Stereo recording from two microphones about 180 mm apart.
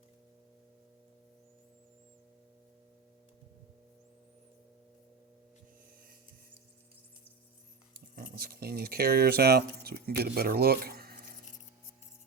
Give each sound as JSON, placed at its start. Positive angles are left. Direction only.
{"t": 8.1, "sound": "speech", "side_deg": -55}